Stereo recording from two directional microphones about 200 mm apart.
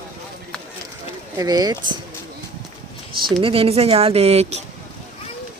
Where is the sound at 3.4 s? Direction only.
25° right (ahead or behind).